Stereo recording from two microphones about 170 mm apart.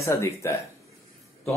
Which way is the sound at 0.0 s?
15° left (ahead or behind).